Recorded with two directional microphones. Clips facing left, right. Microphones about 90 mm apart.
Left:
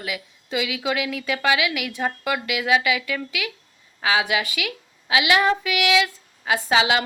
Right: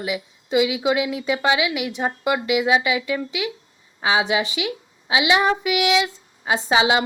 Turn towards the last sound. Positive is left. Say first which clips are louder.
# right 1 dB
turn(degrees=-25)  # may be behind; listen again after turning